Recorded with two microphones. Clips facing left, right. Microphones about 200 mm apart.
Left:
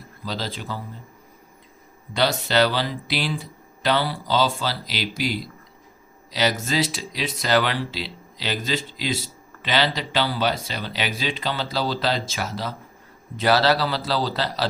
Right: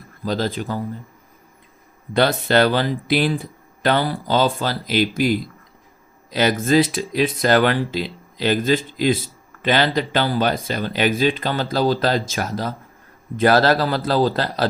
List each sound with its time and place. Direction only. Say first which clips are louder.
0.3 s speech: right 7 dB; 50° right (ahead or behind)
2.1 s speech: right 4 dB; 50° right (ahead or behind)